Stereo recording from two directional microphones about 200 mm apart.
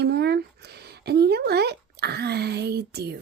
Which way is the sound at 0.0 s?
55° right (ahead or behind).